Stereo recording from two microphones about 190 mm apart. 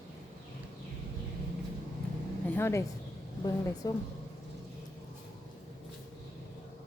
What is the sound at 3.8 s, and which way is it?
Speech, 20° left (ahead or behind).